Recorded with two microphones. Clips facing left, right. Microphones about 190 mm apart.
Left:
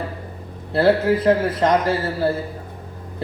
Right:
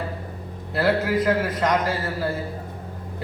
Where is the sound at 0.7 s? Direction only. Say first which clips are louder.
Left 5 dB; 30° left (ahead or behind).